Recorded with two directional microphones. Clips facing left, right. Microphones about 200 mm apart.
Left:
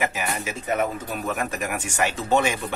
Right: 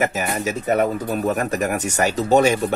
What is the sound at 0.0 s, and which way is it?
Speech, 40° right (ahead or behind).